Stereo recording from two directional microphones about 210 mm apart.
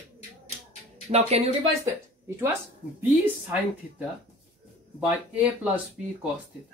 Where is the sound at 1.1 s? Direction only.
30° right (ahead or behind).